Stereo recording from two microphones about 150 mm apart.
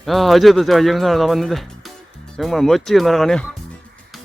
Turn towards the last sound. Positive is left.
turn(degrees=0)  # may be behind; listen again after turning